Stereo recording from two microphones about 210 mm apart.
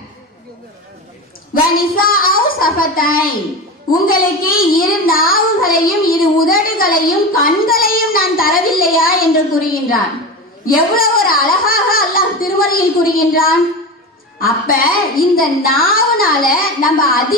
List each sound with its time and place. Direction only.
1.5 s a child's voice: 45° left (ahead or behind)